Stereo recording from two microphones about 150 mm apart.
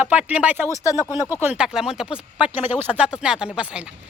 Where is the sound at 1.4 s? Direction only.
10° right (ahead or behind).